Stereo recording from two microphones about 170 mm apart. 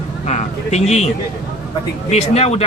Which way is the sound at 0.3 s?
40° left (ahead or behind).